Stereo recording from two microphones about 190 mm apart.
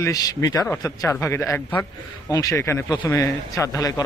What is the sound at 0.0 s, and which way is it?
Speech, 20° left (ahead or behind).